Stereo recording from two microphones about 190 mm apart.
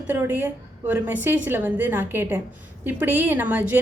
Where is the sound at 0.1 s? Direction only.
10° right (ahead or behind).